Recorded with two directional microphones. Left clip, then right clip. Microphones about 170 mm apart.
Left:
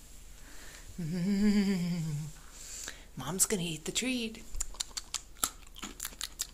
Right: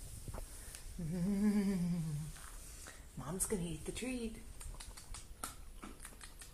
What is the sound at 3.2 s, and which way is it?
Typing, 20° left (ahead or behind).